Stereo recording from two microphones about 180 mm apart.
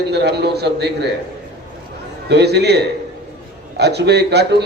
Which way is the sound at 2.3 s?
65° right (ahead or behind).